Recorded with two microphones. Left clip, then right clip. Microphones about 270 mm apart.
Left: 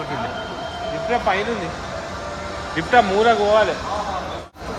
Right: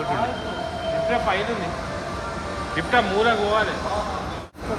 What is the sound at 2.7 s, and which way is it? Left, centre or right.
Speech, centre.